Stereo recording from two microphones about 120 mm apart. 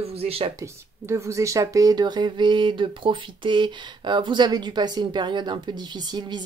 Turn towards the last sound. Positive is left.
turn(degrees=-40)  # may be behind; listen again after turning